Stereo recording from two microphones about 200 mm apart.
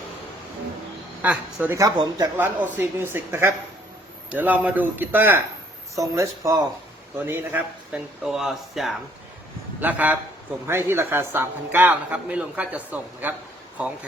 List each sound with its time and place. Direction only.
1.2 s speech: 5° right (ahead or behind)